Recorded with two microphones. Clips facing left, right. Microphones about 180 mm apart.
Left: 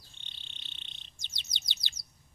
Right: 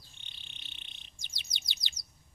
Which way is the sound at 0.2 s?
20° left (ahead or behind).